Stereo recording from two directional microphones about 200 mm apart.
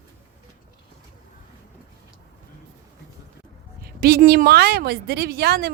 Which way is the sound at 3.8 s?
50° right (ahead or behind).